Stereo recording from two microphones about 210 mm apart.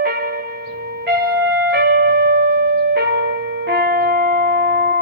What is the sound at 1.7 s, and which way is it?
Music, 50° right (ahead or behind).